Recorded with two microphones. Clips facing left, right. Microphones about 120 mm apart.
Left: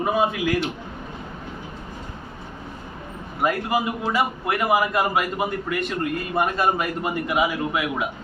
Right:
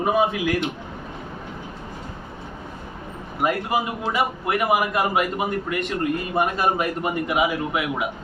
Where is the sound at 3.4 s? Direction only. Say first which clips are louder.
Even; 20° right (ahead or behind).